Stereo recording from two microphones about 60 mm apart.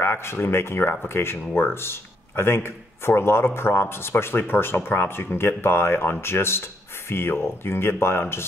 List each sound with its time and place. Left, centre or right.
0.0 s speech: left